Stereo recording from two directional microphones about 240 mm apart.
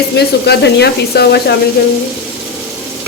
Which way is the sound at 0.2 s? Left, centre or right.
Left.